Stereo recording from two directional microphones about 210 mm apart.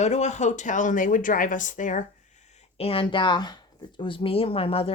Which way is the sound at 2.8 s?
25° left (ahead or behind).